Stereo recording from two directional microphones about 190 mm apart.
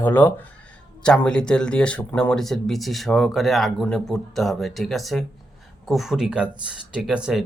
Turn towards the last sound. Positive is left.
turn(degrees=-5)  # may be behind; listen again after turning